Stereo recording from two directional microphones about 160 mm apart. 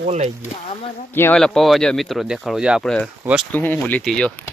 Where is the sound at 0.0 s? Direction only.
45° right (ahead or behind).